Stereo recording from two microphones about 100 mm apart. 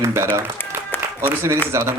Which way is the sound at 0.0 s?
30° right (ahead or behind).